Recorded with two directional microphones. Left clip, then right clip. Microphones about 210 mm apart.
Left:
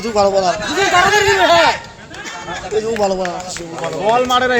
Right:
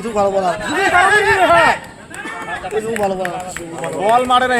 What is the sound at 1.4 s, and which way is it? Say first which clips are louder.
Speech: left 1 dB; 30° left (ahead or behind).